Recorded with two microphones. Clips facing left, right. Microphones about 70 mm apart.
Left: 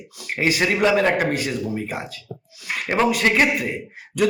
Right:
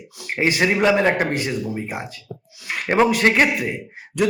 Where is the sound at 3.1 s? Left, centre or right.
Right.